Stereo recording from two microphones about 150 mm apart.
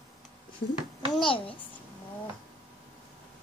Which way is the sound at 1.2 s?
35° left (ahead or behind).